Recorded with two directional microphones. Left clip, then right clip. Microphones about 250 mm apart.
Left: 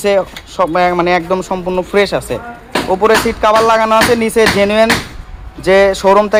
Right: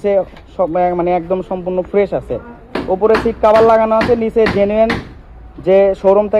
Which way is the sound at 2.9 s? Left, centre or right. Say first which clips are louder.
Left 2 dB; left.